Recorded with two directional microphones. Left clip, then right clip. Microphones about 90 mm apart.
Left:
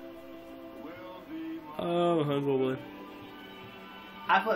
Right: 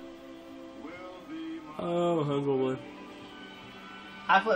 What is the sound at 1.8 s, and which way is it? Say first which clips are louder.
Speech: left 1 dB; 15° right (ahead or behind).